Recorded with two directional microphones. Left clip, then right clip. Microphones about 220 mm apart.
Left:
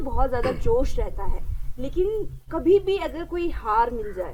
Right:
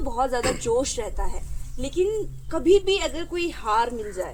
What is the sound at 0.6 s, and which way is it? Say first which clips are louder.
A woman's voice: even; 5° left (ahead or behind).